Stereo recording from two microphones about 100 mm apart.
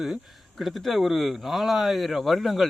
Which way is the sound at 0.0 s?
Centre (ahead or behind).